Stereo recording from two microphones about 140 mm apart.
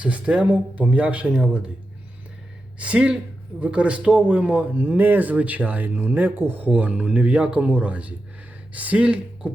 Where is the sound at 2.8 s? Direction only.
10° right (ahead or behind).